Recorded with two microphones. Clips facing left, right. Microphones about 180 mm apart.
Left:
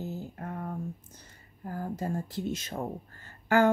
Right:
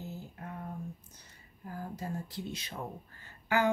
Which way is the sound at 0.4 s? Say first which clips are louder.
Left 4 dB; 55° left (ahead or behind).